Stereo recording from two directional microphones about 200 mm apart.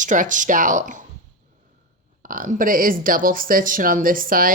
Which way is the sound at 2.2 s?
45° right (ahead or behind).